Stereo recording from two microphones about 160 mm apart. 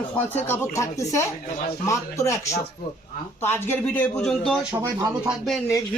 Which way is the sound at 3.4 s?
15° left (ahead or behind).